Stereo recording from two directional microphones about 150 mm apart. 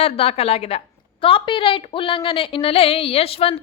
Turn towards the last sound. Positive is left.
turn(degrees=40)  # may be behind; listen again after turning